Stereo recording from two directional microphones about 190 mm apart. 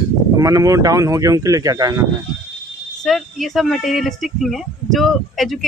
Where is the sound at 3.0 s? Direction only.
Centre (ahead or behind).